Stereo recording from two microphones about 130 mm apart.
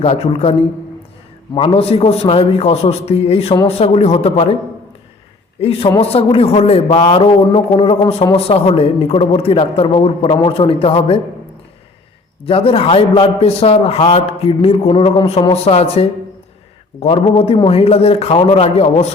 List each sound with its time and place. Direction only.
0.0 s a man's voice: 50° left (ahead or behind)
1.5 s a man's voice: 45° left (ahead or behind)
5.5 s a man's voice: 50° left (ahead or behind)
12.5 s a man's voice: 45° left (ahead or behind)